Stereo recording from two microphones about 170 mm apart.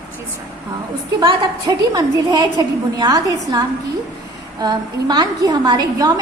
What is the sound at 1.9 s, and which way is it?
A woman's voice, 25° right (ahead or behind).